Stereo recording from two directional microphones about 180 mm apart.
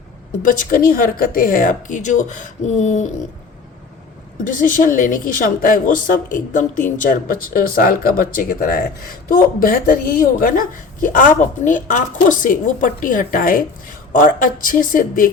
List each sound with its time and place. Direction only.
0.4 s a woman's voice: 50° left (ahead or behind)
4.4 s a woman's voice: 50° left (ahead or behind)